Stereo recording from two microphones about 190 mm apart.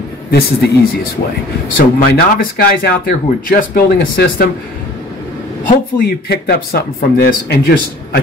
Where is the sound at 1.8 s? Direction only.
50° left (ahead or behind).